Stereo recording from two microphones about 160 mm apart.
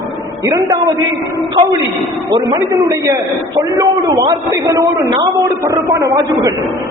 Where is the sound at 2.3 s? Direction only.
20° right (ahead or behind).